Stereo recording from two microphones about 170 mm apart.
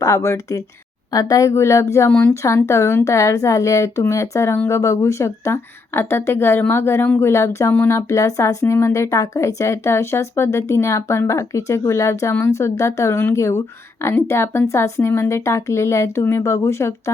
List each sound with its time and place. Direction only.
0.0 s a woman's voice: 20° left (ahead or behind)